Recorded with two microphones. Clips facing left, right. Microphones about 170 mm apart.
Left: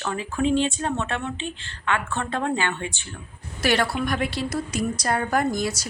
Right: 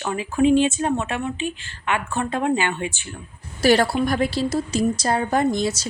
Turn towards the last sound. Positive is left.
turn(degrees=-25)  # may be behind; listen again after turning